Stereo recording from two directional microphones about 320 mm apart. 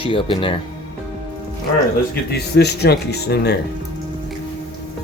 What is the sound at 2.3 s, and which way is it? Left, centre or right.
Speech, left.